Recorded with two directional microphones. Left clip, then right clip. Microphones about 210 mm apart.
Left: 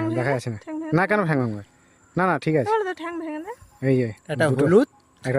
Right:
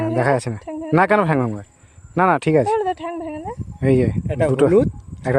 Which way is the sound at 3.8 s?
10° right (ahead or behind).